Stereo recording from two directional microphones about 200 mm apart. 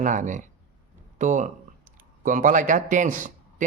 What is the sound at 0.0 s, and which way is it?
A man's voice, 40° right (ahead or behind).